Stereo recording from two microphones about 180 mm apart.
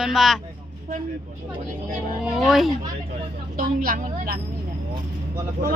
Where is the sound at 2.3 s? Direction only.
Centre (ahead or behind).